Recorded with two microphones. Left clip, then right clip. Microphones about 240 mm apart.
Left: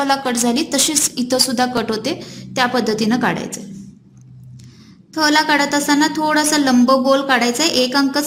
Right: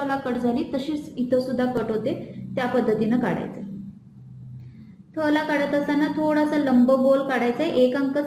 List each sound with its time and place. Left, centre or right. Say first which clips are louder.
0.1 s a woman's voice: left 8 dB; left
5.1 s a woman's voice: left 8 dB; left